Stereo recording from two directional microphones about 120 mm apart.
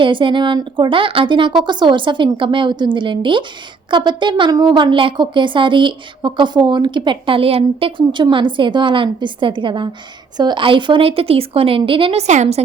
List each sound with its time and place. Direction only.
0.0 s a woman's voice: 45° right (ahead or behind); by 12.6 s 70° right (ahead or behind)